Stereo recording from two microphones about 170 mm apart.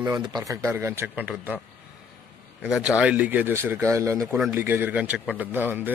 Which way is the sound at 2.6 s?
5° right (ahead or behind).